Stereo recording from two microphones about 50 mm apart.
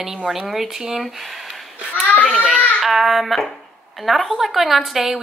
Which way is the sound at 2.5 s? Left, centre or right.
Centre.